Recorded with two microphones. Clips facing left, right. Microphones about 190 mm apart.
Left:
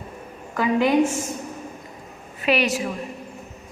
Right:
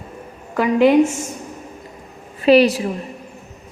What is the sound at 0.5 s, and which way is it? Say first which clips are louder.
Speech: right 6 dB; 15° right (ahead or behind).